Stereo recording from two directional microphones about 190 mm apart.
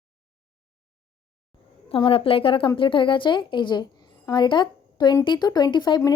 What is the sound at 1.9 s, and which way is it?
Speech, 30° left (ahead or behind).